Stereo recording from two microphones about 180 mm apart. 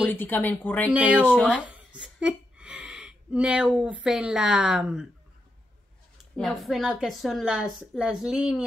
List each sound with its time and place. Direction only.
0.0 s speech: 10° left (ahead or behind)
0.9 s speech: 5° right (ahead or behind)
1.2 s speech: 10° left (ahead or behind)
1.5 s speech: 5° right (ahead or behind)
6.3 s a woman's voice: centre (ahead or behind)